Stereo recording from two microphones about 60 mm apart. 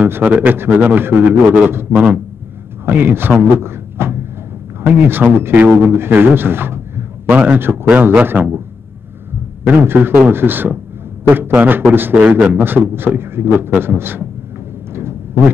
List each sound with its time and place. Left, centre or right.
0.0 s a man's voice: right
2.0 s a man's voice: right
5.9 s a man's voice: right
7.2 s a man's voice: right
9.7 s a man's voice: right
12.2 s a man's voice: centre
12.4 s a man's voice: right
15.0 s a sound: right